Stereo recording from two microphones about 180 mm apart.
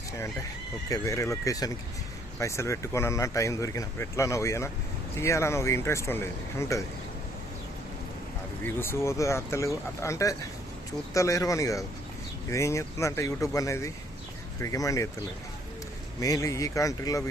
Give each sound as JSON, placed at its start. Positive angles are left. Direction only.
{"t": 0.9, "sound": "speech", "side_deg": 15}
{"t": 8.6, "sound": "speech", "side_deg": 15}
{"t": 16.2, "sound": "speech", "side_deg": 20}